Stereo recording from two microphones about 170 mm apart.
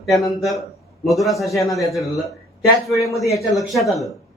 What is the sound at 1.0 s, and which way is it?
A man's voice, centre (ahead or behind).